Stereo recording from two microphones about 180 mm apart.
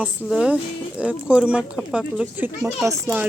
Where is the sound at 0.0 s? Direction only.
5° right (ahead or behind).